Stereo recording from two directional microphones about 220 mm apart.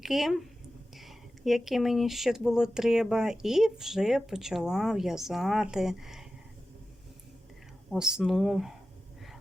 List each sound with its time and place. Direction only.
0.0 s speech: centre (ahead or behind)
7.9 s speech: 5° right (ahead or behind)